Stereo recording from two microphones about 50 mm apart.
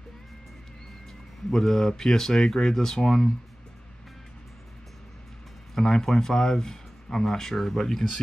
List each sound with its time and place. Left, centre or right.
1.5 s speech: centre
5.8 s speech: centre